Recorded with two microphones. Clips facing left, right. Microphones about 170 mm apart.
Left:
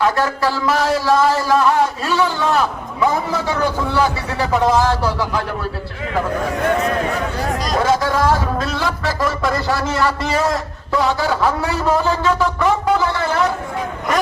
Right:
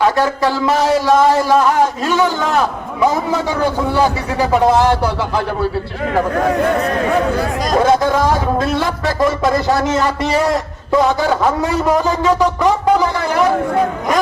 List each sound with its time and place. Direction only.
0.0 s a man's voice: 20° right (ahead or behind)
3.9 s a man's voice: 20° right (ahead or behind)
7.9 s a man's voice: 20° right (ahead or behind)